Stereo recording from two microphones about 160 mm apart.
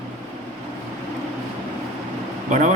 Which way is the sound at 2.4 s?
50° right (ahead or behind).